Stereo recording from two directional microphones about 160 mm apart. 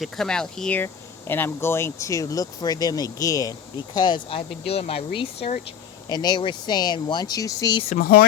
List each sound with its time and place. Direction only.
0.0 s speech: 5° left (ahead or behind); by 5.5 s 35° left (ahead or behind)
6.1 s speech: 25° left (ahead or behind)
7.9 s speech: 60° left (ahead or behind)